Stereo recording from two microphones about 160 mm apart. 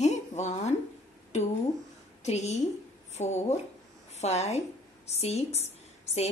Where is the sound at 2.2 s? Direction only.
45° left (ahead or behind).